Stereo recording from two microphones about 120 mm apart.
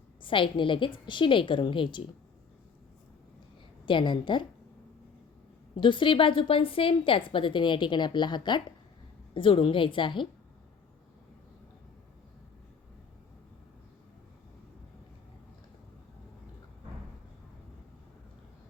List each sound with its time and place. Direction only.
0.2 s a woman's voice: 45° left (ahead or behind)
3.8 s a woman's voice: 40° left (ahead or behind)
5.7 s a woman's voice: 45° left (ahead or behind)